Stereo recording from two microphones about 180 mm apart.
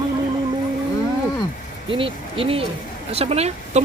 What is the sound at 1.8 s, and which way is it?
Speech, 30° right (ahead or behind).